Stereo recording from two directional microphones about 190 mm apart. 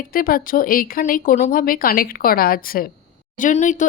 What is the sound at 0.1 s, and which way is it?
A woman's voice, 50° left (ahead or behind).